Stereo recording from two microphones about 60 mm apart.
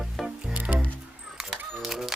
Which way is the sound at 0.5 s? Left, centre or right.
Right.